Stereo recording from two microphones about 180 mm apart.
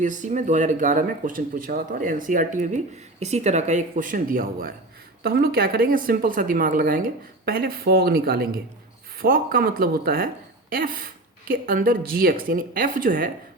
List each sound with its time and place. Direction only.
0.0 s speech: 45° right (ahead or behind)